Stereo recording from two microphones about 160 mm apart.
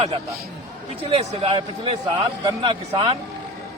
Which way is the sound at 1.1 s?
40° right (ahead or behind).